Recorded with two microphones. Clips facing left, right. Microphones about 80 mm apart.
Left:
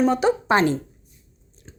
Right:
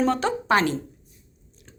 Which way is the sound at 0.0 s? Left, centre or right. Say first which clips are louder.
Left 4 dB; centre.